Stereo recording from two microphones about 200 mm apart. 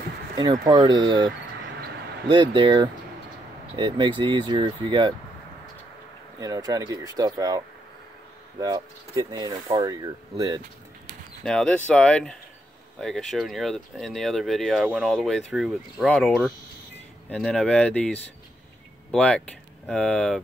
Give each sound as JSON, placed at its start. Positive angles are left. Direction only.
{"t": 0.4, "sound": "speech", "side_deg": -20}
{"t": 6.4, "sound": "speech", "side_deg": -20}
{"t": 11.4, "sound": "speech", "side_deg": 5}